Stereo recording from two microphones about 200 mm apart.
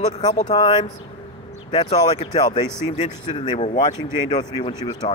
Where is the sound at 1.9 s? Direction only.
25° left (ahead or behind).